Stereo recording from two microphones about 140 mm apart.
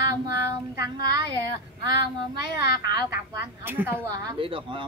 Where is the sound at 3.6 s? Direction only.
15° right (ahead or behind).